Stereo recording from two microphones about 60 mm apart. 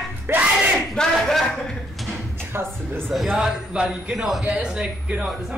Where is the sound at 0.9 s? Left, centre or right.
Centre.